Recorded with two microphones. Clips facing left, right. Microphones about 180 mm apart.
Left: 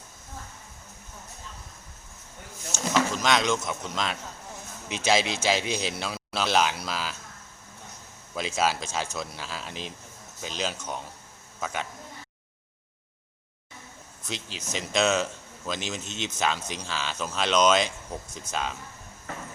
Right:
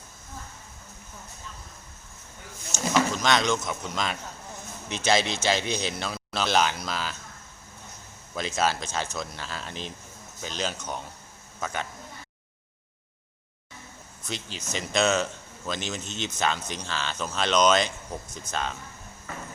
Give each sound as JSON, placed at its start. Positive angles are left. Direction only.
{"t": 3.2, "sound": "a man's voice", "side_deg": 5}
{"t": 8.4, "sound": "a man's voice", "side_deg": 5}
{"t": 14.3, "sound": "a man's voice", "side_deg": 0}